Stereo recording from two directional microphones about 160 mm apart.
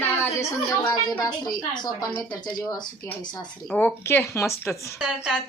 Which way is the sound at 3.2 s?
25° left (ahead or behind).